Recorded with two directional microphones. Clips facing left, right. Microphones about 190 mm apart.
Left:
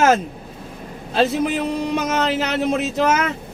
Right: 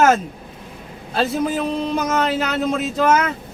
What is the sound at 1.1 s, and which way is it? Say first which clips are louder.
Speech: left 2 dB; 25° left (ahead or behind).